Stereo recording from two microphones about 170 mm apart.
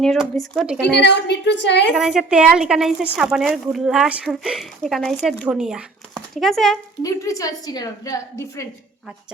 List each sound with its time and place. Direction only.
0.0 s a woman's voice: centre (ahead or behind)
0.9 s speech: 80° left
2.0 s a woman's voice: 5° right (ahead or behind)
7.0 s a woman's voice: 20° left (ahead or behind)